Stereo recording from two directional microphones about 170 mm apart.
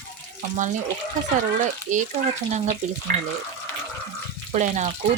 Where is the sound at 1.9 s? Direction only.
45° right (ahead or behind).